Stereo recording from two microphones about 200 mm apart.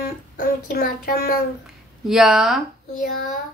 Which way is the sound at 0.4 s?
45° left (ahead or behind).